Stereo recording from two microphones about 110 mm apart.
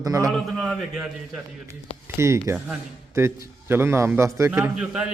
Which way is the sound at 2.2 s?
25° right (ahead or behind).